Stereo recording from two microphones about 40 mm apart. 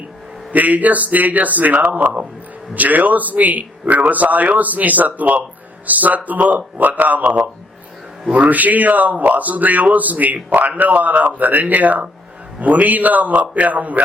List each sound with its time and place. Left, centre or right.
0.5 s a man's voice: right
8.3 s a man's voice: right